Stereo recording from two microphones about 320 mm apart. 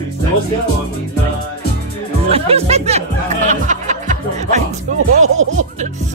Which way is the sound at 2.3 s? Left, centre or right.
Centre.